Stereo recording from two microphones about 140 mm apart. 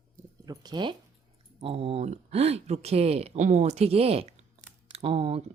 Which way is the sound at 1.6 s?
45° right (ahead or behind).